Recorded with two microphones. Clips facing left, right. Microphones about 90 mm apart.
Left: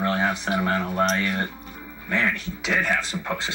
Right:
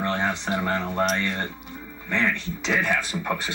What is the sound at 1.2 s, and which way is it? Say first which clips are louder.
Speech: left 2 dB; 5° left (ahead or behind).